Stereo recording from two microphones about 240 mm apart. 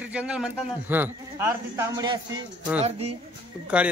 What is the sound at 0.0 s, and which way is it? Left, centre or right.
Speech, centre.